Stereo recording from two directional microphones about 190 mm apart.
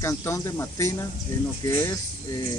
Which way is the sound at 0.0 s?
15° left (ahead or behind).